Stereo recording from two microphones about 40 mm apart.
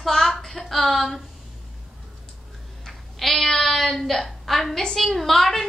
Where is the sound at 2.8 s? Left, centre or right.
Centre.